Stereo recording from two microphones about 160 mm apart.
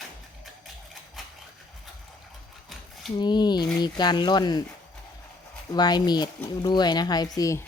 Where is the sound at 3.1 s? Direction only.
25° left (ahead or behind).